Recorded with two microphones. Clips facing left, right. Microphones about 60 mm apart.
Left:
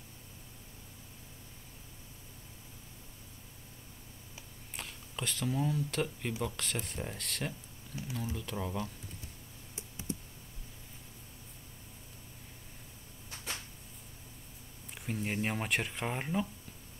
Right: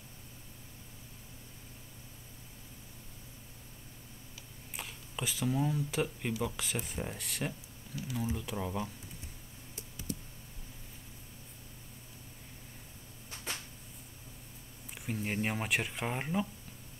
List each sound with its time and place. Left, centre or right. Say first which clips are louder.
4.7 s speech: right 1 dB; centre
9.8 s computer keyboard: left 1 dB; left
15.0 s speech: even; centre